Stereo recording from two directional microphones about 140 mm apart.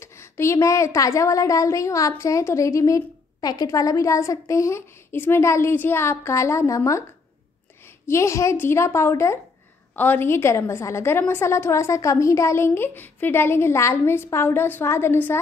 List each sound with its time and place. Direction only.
0.0 s a woman's voice: 20° left (ahead or behind)